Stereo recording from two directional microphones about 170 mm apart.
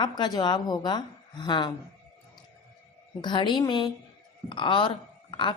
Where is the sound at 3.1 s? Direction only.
25° left (ahead or behind).